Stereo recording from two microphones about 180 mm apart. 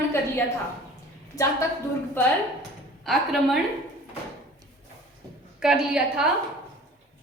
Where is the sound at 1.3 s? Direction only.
20° left (ahead or behind).